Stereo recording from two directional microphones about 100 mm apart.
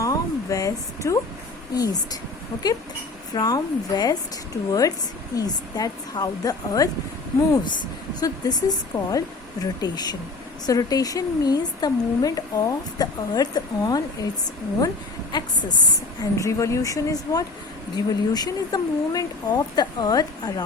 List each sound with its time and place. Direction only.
0.0 s a sound: 35° left (ahead or behind)
1.7 s a woman's voice: 40° left (ahead or behind)
3.3 s a woman's voice: 40° left (ahead or behind)
8.2 s a woman's voice: 40° left (ahead or behind)
15.3 s a woman's voice: 45° left (ahead or behind)
16.4 s a woman's voice: 30° left (ahead or behind)